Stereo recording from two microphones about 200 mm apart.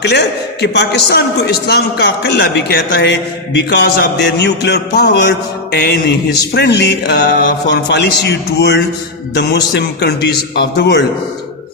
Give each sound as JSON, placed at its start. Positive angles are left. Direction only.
{"t": 0.0, "sound": "a man's voice", "side_deg": 60}